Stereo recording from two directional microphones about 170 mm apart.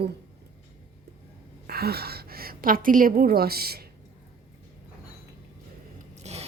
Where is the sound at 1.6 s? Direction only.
65° right (ahead or behind).